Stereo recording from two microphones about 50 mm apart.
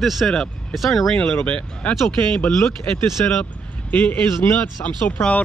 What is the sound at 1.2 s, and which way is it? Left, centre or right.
Speech, centre.